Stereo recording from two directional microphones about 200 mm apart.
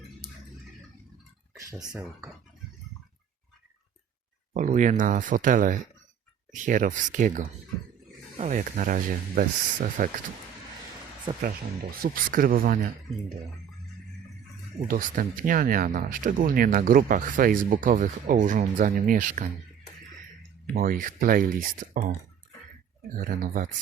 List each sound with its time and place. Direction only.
1.9 s speech: 15° right (ahead or behind)
4.5 s speech: 40° right (ahead or behind)
11.4 s speech: 45° right (ahead or behind)
14.8 s speech: 45° right (ahead or behind)
20.7 s speech: 40° right (ahead or behind)